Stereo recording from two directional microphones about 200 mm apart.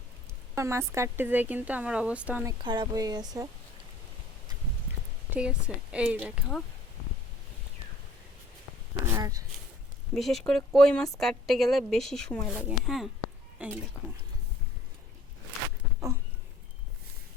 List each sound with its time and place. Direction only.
0.5 s speech: 15° right (ahead or behind)
5.3 s a woman's voice: 5° right (ahead or behind)
9.1 s speech: 15° right (ahead or behind)
10.2 s a woman's voice: centre (ahead or behind)